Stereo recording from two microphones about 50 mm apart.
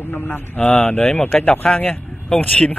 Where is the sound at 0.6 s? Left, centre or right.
Left.